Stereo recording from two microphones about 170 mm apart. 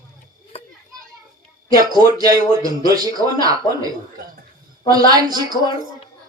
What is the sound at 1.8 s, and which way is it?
Speech, 20° right (ahead or behind).